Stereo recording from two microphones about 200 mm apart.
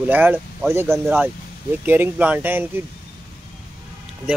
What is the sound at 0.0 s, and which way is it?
Speech, 10° right (ahead or behind).